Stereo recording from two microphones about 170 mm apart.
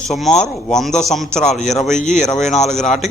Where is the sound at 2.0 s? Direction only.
45° left (ahead or behind).